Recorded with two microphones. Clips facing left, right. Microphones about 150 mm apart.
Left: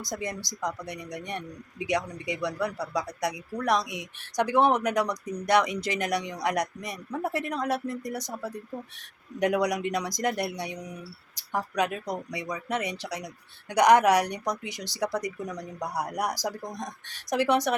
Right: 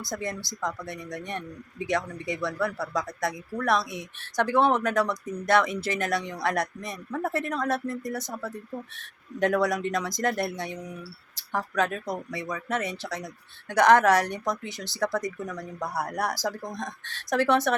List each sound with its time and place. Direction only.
0.0 s speech: 15° left (ahead or behind)